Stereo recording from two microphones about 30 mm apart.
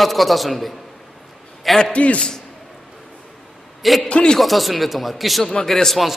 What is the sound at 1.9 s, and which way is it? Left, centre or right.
Speech, left.